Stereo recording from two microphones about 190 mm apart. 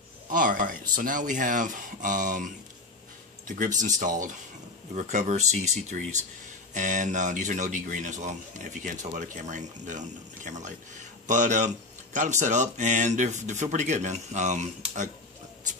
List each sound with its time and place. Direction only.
0.3 s speech: 45° right (ahead or behind)